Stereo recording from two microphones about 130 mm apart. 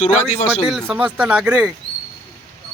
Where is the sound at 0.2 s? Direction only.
55° left (ahead or behind).